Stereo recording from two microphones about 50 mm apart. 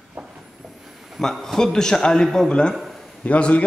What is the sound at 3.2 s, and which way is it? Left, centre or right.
Speech, left.